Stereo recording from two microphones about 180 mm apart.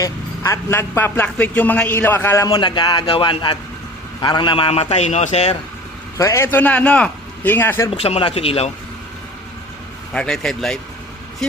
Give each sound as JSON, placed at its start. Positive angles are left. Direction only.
{"t": 0.0, "sound": "a man's voice", "side_deg": 15}
{"t": 6.1, "sound": "a man's voice", "side_deg": 15}
{"t": 7.9, "sound": "a man's voice", "side_deg": 35}
{"t": 10.1, "sound": "a man's voice", "side_deg": 5}